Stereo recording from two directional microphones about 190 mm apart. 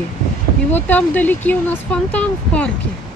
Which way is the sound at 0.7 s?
10° left (ahead or behind).